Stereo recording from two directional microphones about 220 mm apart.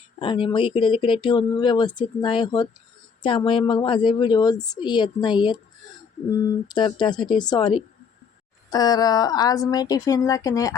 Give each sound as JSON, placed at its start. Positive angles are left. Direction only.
{"t": 0.2, "sound": "speech", "side_deg": 25}
{"t": 6.7, "sound": "speech", "side_deg": 20}